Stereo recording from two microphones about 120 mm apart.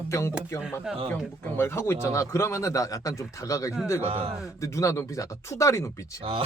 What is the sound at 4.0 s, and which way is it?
Speech, 55° right (ahead or behind).